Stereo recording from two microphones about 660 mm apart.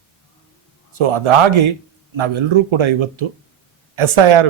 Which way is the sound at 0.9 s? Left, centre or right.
Right.